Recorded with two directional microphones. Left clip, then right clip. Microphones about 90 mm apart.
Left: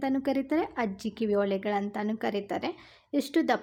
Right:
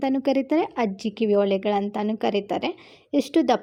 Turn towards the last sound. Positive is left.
turn(degrees=-20)  # may be behind; listen again after turning